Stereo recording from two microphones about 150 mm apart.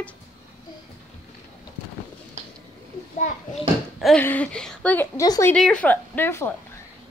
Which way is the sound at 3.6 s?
Centre (ahead or behind).